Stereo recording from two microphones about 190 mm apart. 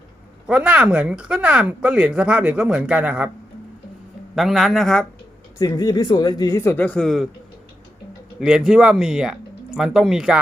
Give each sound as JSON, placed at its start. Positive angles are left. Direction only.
{"t": 0.4, "sound": "speech", "side_deg": -5}
{"t": 4.4, "sound": "speech", "side_deg": 0}
{"t": 5.5, "sound": "speech", "side_deg": 20}
{"t": 8.4, "sound": "speech", "side_deg": -5}